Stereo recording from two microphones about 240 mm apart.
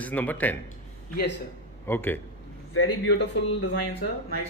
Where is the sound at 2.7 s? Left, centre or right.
Left.